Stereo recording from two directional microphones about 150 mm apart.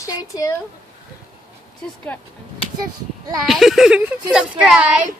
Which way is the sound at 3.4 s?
Centre (ahead or behind).